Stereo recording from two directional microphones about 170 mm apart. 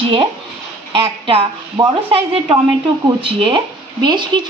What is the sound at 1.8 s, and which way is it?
Speech, 30° right (ahead or behind).